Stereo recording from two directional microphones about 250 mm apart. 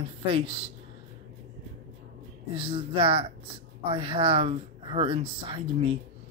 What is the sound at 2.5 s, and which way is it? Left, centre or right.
Speech, right.